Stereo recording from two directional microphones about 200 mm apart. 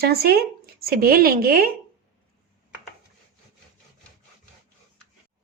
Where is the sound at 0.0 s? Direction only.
50° right (ahead or behind).